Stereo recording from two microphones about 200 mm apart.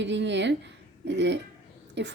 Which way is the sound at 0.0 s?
60° right (ahead or behind).